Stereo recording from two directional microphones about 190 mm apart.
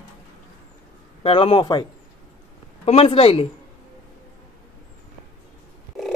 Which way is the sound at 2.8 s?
30° left (ahead or behind).